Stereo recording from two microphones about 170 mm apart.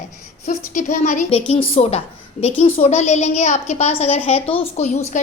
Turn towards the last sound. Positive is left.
turn(degrees=40)  # may be behind; listen again after turning